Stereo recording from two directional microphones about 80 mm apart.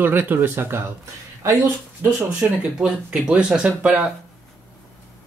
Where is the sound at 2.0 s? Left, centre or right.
Right.